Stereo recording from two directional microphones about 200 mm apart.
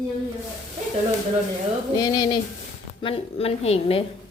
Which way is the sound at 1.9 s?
20° left (ahead or behind).